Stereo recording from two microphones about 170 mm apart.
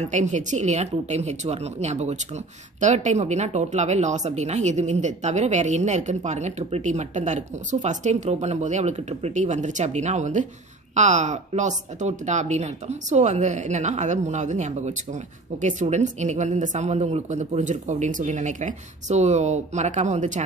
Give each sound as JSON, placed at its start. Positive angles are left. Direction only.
{"t": 0.0, "sound": "a woman's voice", "side_deg": -45}